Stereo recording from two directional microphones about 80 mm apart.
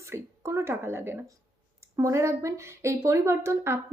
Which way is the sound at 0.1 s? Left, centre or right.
Right.